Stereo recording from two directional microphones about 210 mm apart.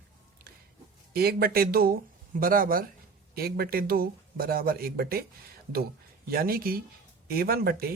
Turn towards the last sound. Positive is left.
turn(degrees=-45)  # may be behind; listen again after turning